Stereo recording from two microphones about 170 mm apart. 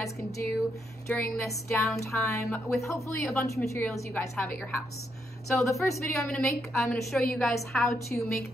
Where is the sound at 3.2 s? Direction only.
10° left (ahead or behind).